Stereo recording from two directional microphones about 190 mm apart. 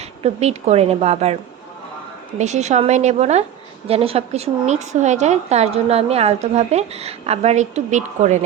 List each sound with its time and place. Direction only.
0.2 s speech: 35° right (ahead or behind)
2.4 s speech: 35° right (ahead or behind)